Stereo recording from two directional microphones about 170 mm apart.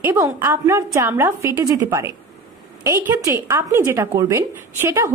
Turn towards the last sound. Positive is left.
turn(degrees=-15)  # may be behind; listen again after turning